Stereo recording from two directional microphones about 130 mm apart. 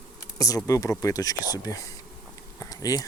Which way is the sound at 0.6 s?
25° left (ahead or behind).